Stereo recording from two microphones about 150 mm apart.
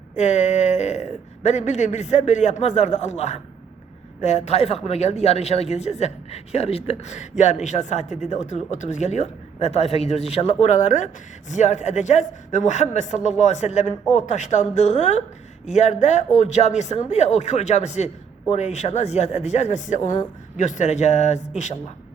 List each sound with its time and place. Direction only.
0.2 s speech: 50° left (ahead or behind)